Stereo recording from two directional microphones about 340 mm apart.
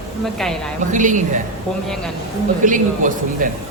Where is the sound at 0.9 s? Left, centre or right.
Right.